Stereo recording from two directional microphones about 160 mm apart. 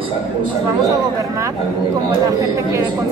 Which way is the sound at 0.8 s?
20° right (ahead or behind).